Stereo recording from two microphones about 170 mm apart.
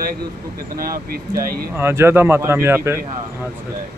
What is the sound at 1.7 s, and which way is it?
Speech, 15° right (ahead or behind).